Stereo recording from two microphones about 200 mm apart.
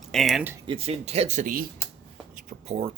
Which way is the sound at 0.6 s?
30° right (ahead or behind).